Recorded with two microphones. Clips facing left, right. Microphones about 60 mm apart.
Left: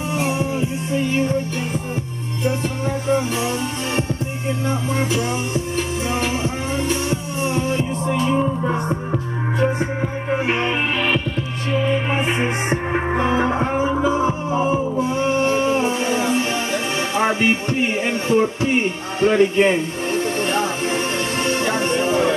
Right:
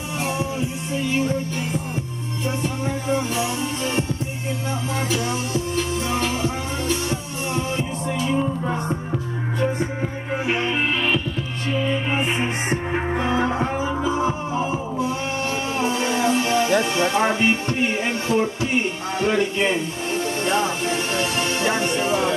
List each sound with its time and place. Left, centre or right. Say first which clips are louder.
0.2 s music: left 2 dB; left
4.6 s music: left 3 dB; left
12.6 s music: left 3 dB; left